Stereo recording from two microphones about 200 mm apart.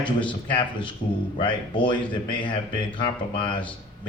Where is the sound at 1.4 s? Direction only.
25° left (ahead or behind).